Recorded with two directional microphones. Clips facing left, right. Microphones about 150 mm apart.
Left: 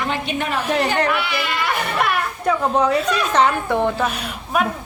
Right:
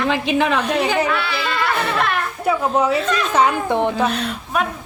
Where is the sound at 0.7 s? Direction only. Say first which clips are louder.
Even; centre (ahead or behind).